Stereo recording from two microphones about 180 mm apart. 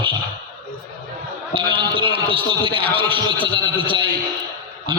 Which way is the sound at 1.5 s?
30° right (ahead or behind).